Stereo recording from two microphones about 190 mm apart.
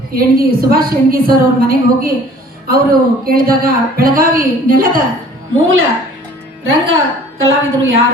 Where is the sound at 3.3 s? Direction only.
50° right (ahead or behind).